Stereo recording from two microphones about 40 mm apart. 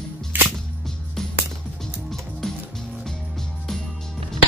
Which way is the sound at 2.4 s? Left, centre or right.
Centre.